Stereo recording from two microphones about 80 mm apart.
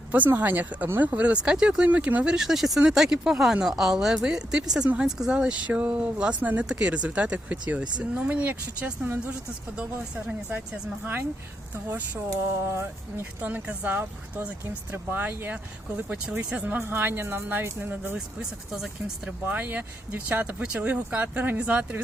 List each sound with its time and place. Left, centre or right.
0.1 s speech: right
2.3 s speech: centre; by 9.3 s right
11.9 s speech: right
12.3 s speech: right
13.4 s speech: centre
16.8 s speech: right
18.3 s speech: centre
19.5 s speech: centre